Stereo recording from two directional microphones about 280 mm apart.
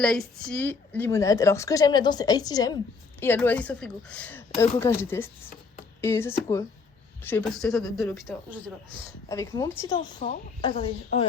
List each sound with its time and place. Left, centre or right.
0.0 s a woman's voice: centre
8.1 s speech: centre
9.3 s a woman's voice: centre
10.2 s speech: left